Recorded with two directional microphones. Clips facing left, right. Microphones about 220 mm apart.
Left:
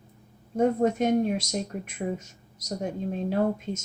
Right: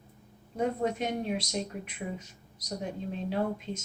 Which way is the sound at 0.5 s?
45° left (ahead or behind).